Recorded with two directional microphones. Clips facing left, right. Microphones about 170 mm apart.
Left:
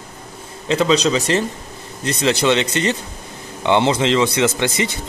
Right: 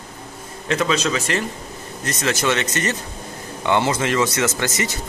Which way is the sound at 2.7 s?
30° left (ahead or behind).